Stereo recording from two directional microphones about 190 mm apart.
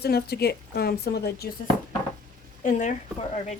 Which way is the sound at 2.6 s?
40° left (ahead or behind).